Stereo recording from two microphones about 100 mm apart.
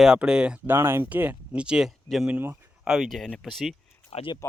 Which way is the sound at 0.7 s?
25° right (ahead or behind).